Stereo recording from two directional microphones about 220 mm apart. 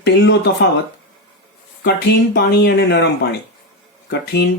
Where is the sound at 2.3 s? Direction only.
50° left (ahead or behind).